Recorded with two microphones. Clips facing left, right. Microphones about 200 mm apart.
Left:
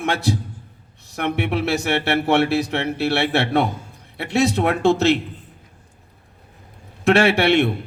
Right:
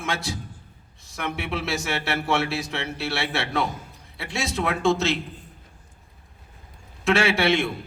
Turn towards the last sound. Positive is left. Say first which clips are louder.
# left 5 dB
turn(degrees=60)  # may be behind; listen again after turning